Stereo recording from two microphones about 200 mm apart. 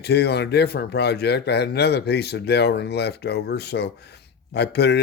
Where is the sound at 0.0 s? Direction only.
55° left (ahead or behind).